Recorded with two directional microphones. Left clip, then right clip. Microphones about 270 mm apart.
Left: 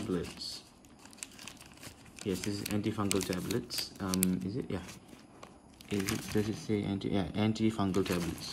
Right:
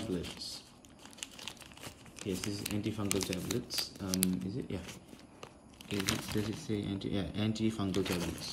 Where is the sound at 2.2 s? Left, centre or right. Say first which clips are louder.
Left 2 dB; centre.